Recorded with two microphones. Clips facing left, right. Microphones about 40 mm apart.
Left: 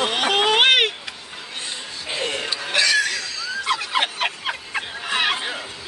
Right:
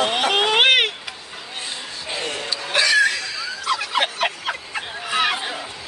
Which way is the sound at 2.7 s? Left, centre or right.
Centre.